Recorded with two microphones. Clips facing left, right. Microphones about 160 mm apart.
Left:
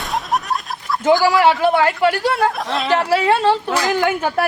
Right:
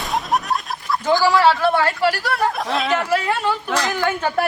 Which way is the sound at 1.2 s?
15° left (ahead or behind).